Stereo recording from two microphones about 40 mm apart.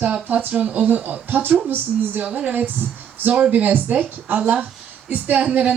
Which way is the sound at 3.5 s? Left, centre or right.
Right.